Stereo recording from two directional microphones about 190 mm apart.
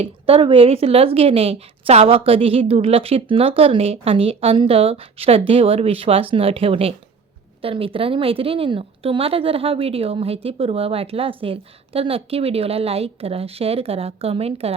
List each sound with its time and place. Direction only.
0.0 s a woman's voice: 30° right (ahead or behind)